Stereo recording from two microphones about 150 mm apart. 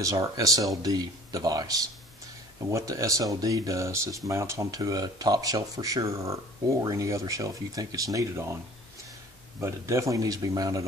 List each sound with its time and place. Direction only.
0.0 s speech: 25° right (ahead or behind)
9.6 s speech: 20° right (ahead or behind)